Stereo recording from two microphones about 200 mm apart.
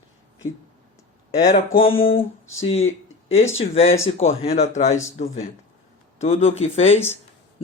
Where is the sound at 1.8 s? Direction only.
30° left (ahead or behind).